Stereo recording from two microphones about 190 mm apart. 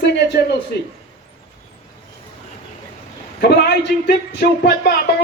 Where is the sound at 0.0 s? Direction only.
60° left (ahead or behind).